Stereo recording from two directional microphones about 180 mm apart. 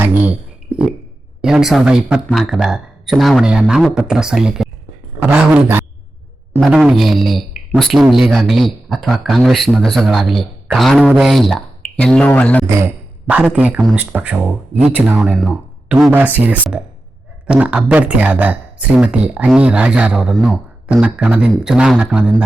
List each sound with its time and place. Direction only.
0.0 s a sound: 10° right (ahead or behind)
1.4 s speech: 5° right (ahead or behind)
12.6 s speech: 15° right (ahead or behind)